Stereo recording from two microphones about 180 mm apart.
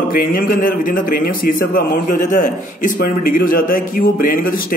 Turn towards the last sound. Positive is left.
turn(degrees=50)  # may be behind; listen again after turning